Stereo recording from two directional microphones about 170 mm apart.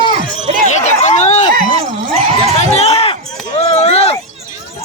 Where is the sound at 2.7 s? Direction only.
40° left (ahead or behind).